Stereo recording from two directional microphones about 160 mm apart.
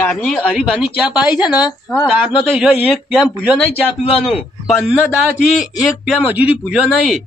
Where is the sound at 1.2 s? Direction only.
25° left (ahead or behind).